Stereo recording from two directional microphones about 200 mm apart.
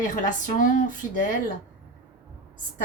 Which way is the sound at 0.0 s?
40° left (ahead or behind).